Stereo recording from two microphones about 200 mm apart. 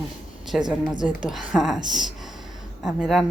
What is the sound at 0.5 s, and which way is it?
A woman's voice, 5° right (ahead or behind).